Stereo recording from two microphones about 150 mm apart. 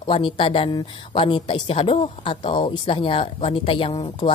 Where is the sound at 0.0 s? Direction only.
35° left (ahead or behind).